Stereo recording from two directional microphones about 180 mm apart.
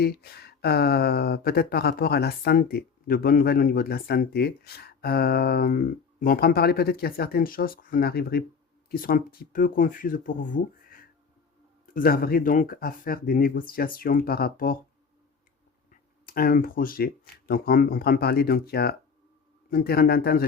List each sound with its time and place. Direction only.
0.0 s speech: 60° left (ahead or behind)
15.9 s speech: 55° left (ahead or behind)